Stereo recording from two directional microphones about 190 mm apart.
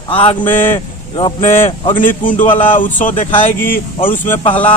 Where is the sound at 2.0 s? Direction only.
45° left (ahead or behind).